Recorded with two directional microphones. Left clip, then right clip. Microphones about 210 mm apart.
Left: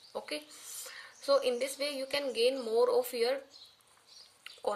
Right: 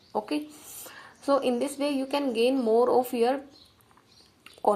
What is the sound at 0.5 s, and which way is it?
Whispering, 45° left (ahead or behind).